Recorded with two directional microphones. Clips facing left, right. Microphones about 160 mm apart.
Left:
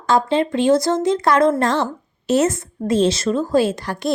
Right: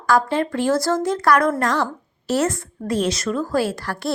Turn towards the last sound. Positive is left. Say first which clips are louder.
# left 4 dB
turn(degrees=20)  # may be behind; listen again after turning